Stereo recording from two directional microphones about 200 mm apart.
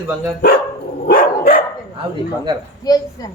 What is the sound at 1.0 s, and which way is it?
Dog, 45° left (ahead or behind).